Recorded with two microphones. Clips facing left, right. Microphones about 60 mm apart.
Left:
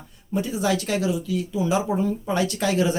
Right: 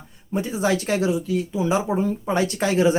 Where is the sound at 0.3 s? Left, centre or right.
Right.